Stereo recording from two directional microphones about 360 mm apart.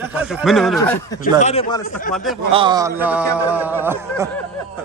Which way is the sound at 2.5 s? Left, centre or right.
Centre.